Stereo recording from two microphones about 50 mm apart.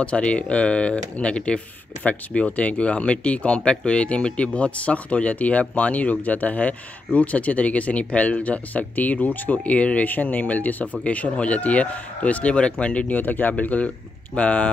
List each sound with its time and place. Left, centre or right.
0.0 s speech: left
13.1 s speech: left